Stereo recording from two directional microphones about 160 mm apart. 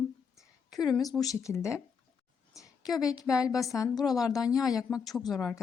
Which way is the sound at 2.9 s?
20° left (ahead or behind).